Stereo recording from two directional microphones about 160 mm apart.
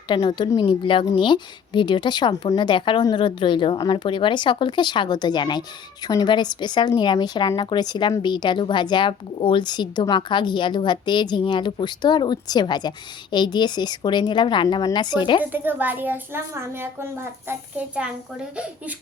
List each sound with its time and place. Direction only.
0.1 s a woman's voice: 30° left (ahead or behind)
15.4 s a child's voice: 10° right (ahead or behind)